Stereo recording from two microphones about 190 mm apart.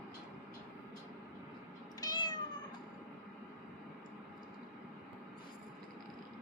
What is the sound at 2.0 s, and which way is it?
Cat, 20° left (ahead or behind).